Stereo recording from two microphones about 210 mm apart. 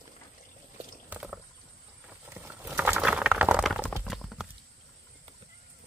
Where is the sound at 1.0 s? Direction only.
5° right (ahead or behind).